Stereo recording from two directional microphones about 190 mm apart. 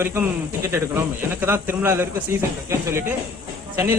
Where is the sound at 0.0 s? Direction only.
10° right (ahead or behind).